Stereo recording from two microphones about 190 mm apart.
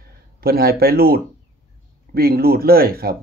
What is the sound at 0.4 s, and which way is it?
Speech, 55° right (ahead or behind).